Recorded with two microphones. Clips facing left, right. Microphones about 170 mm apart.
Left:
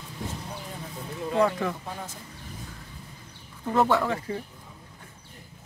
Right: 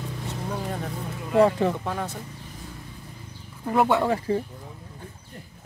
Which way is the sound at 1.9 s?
70° right (ahead or behind).